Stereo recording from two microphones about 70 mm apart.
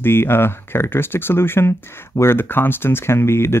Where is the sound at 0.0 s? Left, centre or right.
Left.